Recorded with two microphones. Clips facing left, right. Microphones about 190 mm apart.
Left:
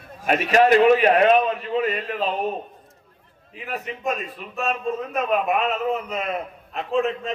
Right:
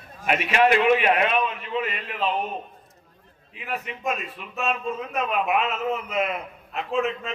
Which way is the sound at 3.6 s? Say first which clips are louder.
Left 1 dB; 40° left (ahead or behind).